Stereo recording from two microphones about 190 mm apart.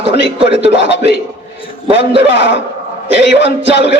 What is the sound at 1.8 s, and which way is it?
Speech, 30° right (ahead or behind).